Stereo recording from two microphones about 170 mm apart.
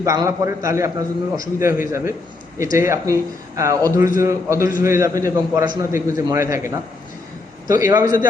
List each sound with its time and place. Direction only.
0.0 s a man's voice: 20° right (ahead or behind)
7.7 s a man's voice: 20° right (ahead or behind)